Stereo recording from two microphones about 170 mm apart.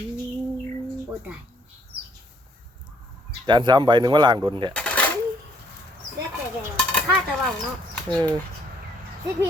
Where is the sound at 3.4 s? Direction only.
25° right (ahead or behind).